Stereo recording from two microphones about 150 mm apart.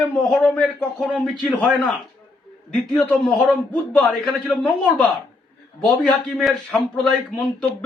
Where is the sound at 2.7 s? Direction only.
5° left (ahead or behind).